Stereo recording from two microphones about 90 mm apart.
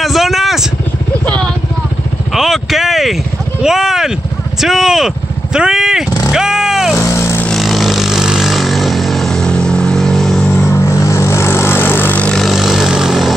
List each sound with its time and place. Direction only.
0.0 s vehicle: centre (ahead or behind)
2.3 s a sound: 5° right (ahead or behind)
4.6 s vehicle: 5° right (ahead or behind)
7.0 s vehicle: 30° left (ahead or behind)
7.5 s vehicle: centre (ahead or behind)
10.7 s vehicle: 30° left (ahead or behind)
12.3 s vehicle: centre (ahead or behind)